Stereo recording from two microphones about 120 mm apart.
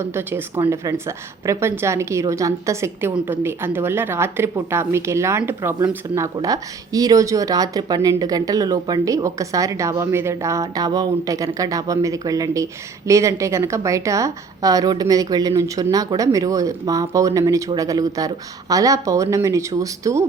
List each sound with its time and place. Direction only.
0.0 s speech: 20° right (ahead or behind)